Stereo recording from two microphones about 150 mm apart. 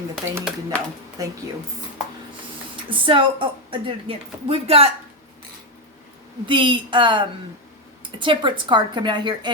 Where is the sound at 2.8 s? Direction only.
35° right (ahead or behind).